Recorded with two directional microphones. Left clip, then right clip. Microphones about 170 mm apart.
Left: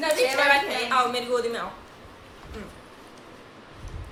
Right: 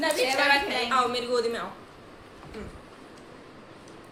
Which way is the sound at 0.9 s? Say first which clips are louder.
Left 2 dB; 30° left (ahead or behind).